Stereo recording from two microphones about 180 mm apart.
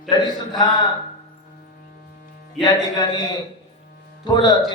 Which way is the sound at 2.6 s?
20° left (ahead or behind).